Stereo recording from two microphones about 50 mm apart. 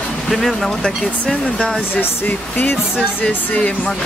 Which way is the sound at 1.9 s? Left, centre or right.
Left.